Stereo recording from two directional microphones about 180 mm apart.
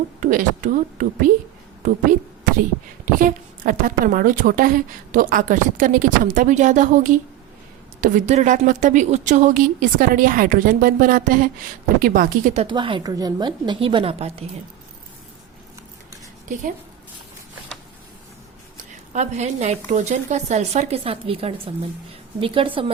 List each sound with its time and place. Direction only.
0.2 s a woman's voice: 45° right (ahead or behind)
12.6 s a woman's voice: 25° right (ahead or behind)
19.1 s a woman's voice: 40° right (ahead or behind)